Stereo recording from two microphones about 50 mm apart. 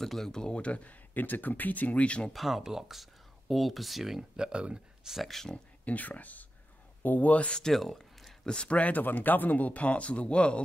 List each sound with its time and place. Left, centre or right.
0.0 s speech: centre; by 0.9 s left
1.1 s speech: left
2.3 s speech: centre; by 4.8 s right
5.0 s speech: centre
5.3 s speech: centre
5.9 s speech: left
7.6 s a sound: centre
8.5 s speech: left